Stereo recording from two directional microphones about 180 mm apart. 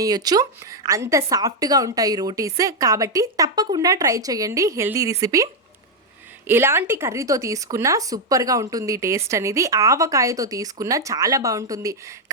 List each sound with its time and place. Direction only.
0.0 s speech: 20° right (ahead or behind)
6.5 s speech: 15° right (ahead or behind)